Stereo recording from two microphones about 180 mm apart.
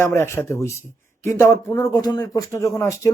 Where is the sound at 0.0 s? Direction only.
15° left (ahead or behind).